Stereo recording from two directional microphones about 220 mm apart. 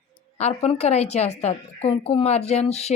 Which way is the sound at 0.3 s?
30° left (ahead or behind).